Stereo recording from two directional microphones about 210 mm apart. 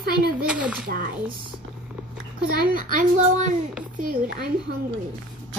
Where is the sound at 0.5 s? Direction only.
5° right (ahead or behind).